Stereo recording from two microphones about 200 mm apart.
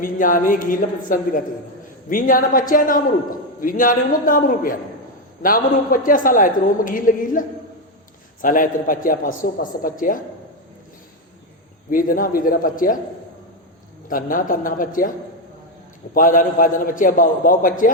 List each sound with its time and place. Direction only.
0.0 s a man's voice: 45° left (ahead or behind)
11.9 s a man's voice: 45° left (ahead or behind)
14.1 s a man's voice: 45° left (ahead or behind)
16.1 s a man's voice: 45° left (ahead or behind)